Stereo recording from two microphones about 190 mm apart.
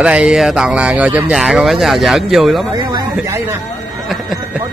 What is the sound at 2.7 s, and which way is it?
Speech, 20° right (ahead or behind).